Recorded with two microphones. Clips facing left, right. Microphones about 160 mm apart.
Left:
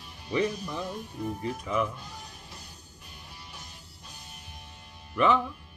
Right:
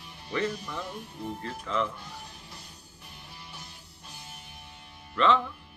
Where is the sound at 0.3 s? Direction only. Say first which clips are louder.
Left 3 dB; 15° left (ahead or behind).